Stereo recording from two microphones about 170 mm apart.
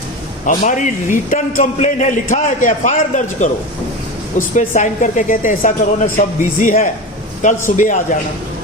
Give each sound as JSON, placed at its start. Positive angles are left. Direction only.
{"t": 0.4, "sound": "a man's voice", "side_deg": 45}